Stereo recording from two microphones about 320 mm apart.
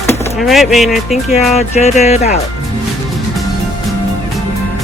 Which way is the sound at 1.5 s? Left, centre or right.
Centre.